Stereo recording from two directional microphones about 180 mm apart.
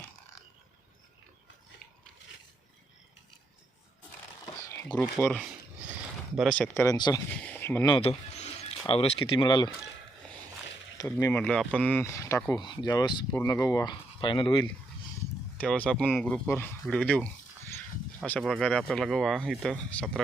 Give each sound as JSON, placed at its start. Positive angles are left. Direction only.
{"t": 4.8, "sound": "speech", "side_deg": 10}
{"t": 6.8, "sound": "speech", "side_deg": 20}
{"t": 7.3, "sound": "speech", "side_deg": 10}
{"t": 7.9, "sound": "speech", "side_deg": 30}
{"t": 10.9, "sound": "speech", "side_deg": 15}
{"t": 15.6, "sound": "speech", "side_deg": 5}